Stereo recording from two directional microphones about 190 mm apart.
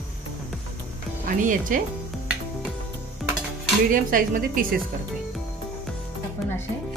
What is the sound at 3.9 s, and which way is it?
Speech, 45° right (ahead or behind).